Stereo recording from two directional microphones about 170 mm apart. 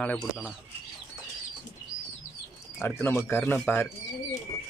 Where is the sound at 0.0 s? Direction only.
10° left (ahead or behind).